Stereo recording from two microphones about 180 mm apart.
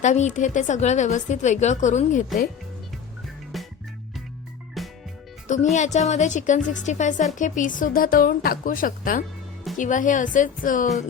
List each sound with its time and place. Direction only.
0.0 s a woman's voice: 40° left (ahead or behind)
3.5 s music: centre (ahead or behind)
4.8 s music: centre (ahead or behind)
5.7 s a woman's voice: 40° left (ahead or behind)